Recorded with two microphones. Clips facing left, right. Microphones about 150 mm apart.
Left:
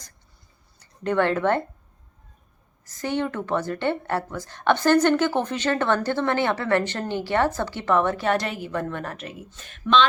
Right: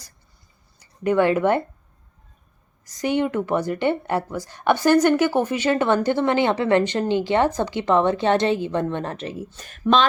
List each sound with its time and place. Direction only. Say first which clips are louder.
0.8 s speech: right 3 dB; 10° right (ahead or behind)
2.8 s a woman's voice: right 4 dB; 15° right (ahead or behind); by 10.1 s 40° right (ahead or behind)